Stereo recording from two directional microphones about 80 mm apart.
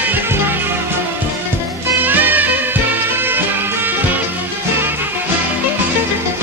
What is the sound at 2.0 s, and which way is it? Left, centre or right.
Music, right.